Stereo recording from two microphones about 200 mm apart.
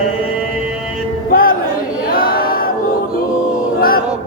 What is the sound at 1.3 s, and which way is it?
Music, 45° left (ahead or behind).